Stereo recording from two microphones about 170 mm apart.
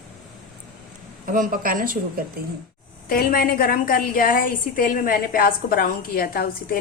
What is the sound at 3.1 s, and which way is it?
A woman's voice, 60° left (ahead or behind).